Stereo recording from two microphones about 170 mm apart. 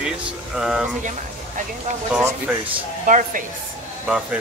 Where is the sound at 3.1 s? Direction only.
50° right (ahead or behind).